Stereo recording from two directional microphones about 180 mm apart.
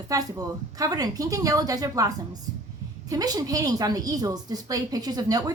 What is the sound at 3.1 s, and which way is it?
A woman's voice, 20° right (ahead or behind).